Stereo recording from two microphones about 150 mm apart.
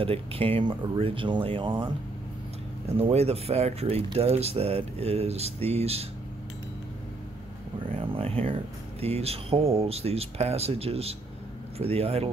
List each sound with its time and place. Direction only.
0.0 s speech: 40° right (ahead or behind)
3.0 s speech: 45° right (ahead or behind)
7.9 s speech: 40° right (ahead or behind)